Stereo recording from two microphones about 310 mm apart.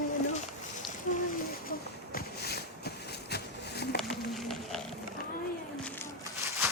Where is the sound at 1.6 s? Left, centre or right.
Left.